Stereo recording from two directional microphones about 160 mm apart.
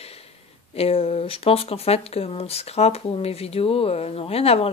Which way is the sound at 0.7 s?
40° left (ahead or behind).